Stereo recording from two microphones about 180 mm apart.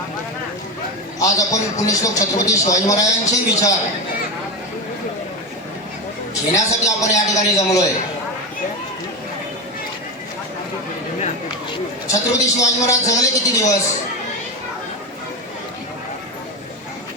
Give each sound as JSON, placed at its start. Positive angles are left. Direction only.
{"t": 1.2, "sound": "a woman's voice", "side_deg": 20}
{"t": 6.3, "sound": "a man's voice", "side_deg": 15}
{"t": 12.0, "sound": "a woman's voice", "side_deg": 15}